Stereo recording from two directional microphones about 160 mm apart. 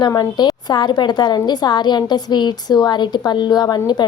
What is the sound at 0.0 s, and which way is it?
A woman's voice, 25° left (ahead or behind).